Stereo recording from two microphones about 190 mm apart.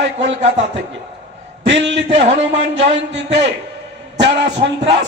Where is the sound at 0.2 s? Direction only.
70° right (ahead or behind).